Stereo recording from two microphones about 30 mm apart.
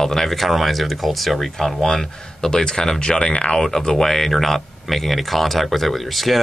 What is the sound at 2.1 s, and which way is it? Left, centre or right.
Speech, left.